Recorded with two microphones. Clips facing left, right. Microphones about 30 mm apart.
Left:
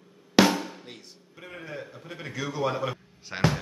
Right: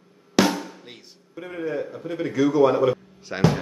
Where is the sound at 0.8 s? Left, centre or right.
Centre.